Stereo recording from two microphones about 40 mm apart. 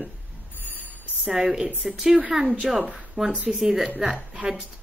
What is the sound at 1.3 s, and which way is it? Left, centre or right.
A woman's voice, centre.